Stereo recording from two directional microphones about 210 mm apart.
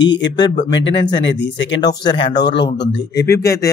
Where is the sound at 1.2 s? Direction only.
60° left (ahead or behind).